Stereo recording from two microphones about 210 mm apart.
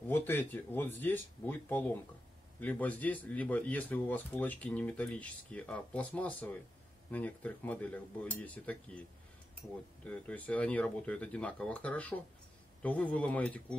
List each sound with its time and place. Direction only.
0.1 s speech: 10° left (ahead or behind)